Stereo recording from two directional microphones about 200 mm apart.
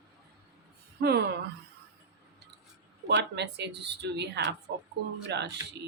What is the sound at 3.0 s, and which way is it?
A woman's voice, 60° right (ahead or behind).